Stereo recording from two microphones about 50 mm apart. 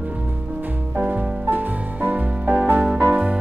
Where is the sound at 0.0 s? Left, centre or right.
Right.